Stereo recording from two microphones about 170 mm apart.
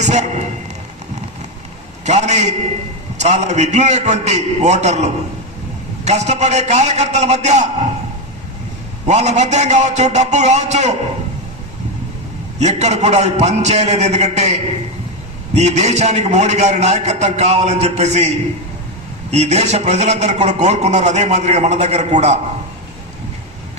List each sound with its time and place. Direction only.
0.0 s a sound: 45° right (ahead or behind)
2.0 s a man's voice: 40° right (ahead or behind)
6.1 s a man's voice: 40° right (ahead or behind)
9.0 s a man's voice: 40° right (ahead or behind)
12.5 s a man's voice: 40° right (ahead or behind)
19.3 s a man's voice: 40° right (ahead or behind)